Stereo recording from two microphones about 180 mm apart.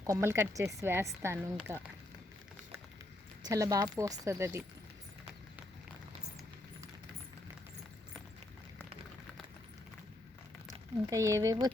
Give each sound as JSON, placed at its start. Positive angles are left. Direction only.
{"t": 0.1, "sound": "speech", "side_deg": -15}
{"t": 3.4, "sound": "speech", "side_deg": -20}
{"t": 10.7, "sound": "speech", "side_deg": -20}